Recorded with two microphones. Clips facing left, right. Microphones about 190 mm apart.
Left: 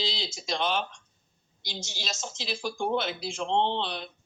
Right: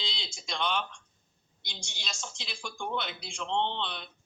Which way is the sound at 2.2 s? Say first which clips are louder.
Left 7 dB; 40° left (ahead or behind).